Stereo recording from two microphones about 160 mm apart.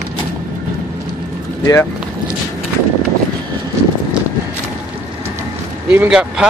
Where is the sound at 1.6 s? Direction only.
20° left (ahead or behind).